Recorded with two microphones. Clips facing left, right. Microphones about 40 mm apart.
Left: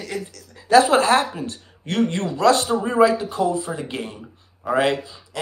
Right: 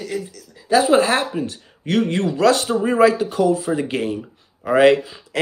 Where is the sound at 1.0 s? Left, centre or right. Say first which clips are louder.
Left 1 dB; right.